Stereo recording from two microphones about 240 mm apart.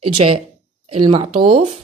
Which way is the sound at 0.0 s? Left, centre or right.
Right.